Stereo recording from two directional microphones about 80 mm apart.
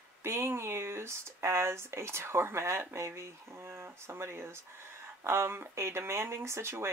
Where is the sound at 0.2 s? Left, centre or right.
Right.